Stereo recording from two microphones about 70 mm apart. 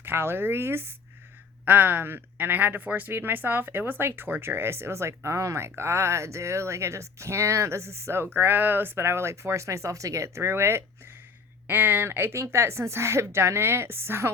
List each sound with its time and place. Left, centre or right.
0.0 s speech: right